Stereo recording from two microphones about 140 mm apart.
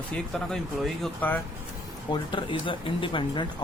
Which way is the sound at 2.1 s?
35° left (ahead or behind).